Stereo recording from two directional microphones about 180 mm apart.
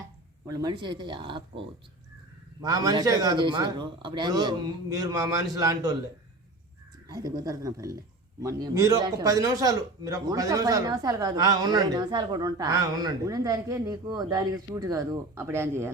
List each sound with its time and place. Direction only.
0.4 s a man's voice: 20° right (ahead or behind)
7.1 s a man's voice: 20° right (ahead or behind)